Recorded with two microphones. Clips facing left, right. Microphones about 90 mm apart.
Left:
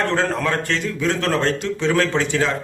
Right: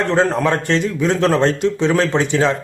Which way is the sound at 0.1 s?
20° right (ahead or behind).